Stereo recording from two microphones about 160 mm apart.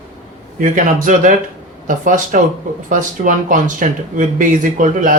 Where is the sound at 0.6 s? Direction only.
55° right (ahead or behind).